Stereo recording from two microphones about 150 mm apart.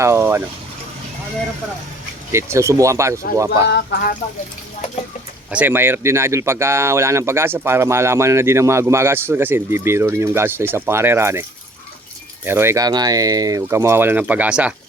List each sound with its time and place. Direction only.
0.0 s speech: 15° right (ahead or behind)
2.3 s speech: 20° right (ahead or behind)
3.9 s speech: 90° left
5.5 s speech: 10° right (ahead or behind)
12.5 s speech: 15° right (ahead or behind)